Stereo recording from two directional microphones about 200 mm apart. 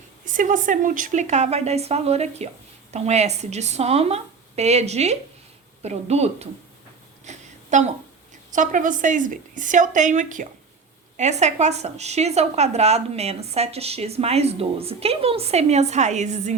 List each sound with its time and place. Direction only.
0.3 s speech: 40° right (ahead or behind)
7.3 s a sound: 35° right (ahead or behind)
8.5 s speech: 40° right (ahead or behind)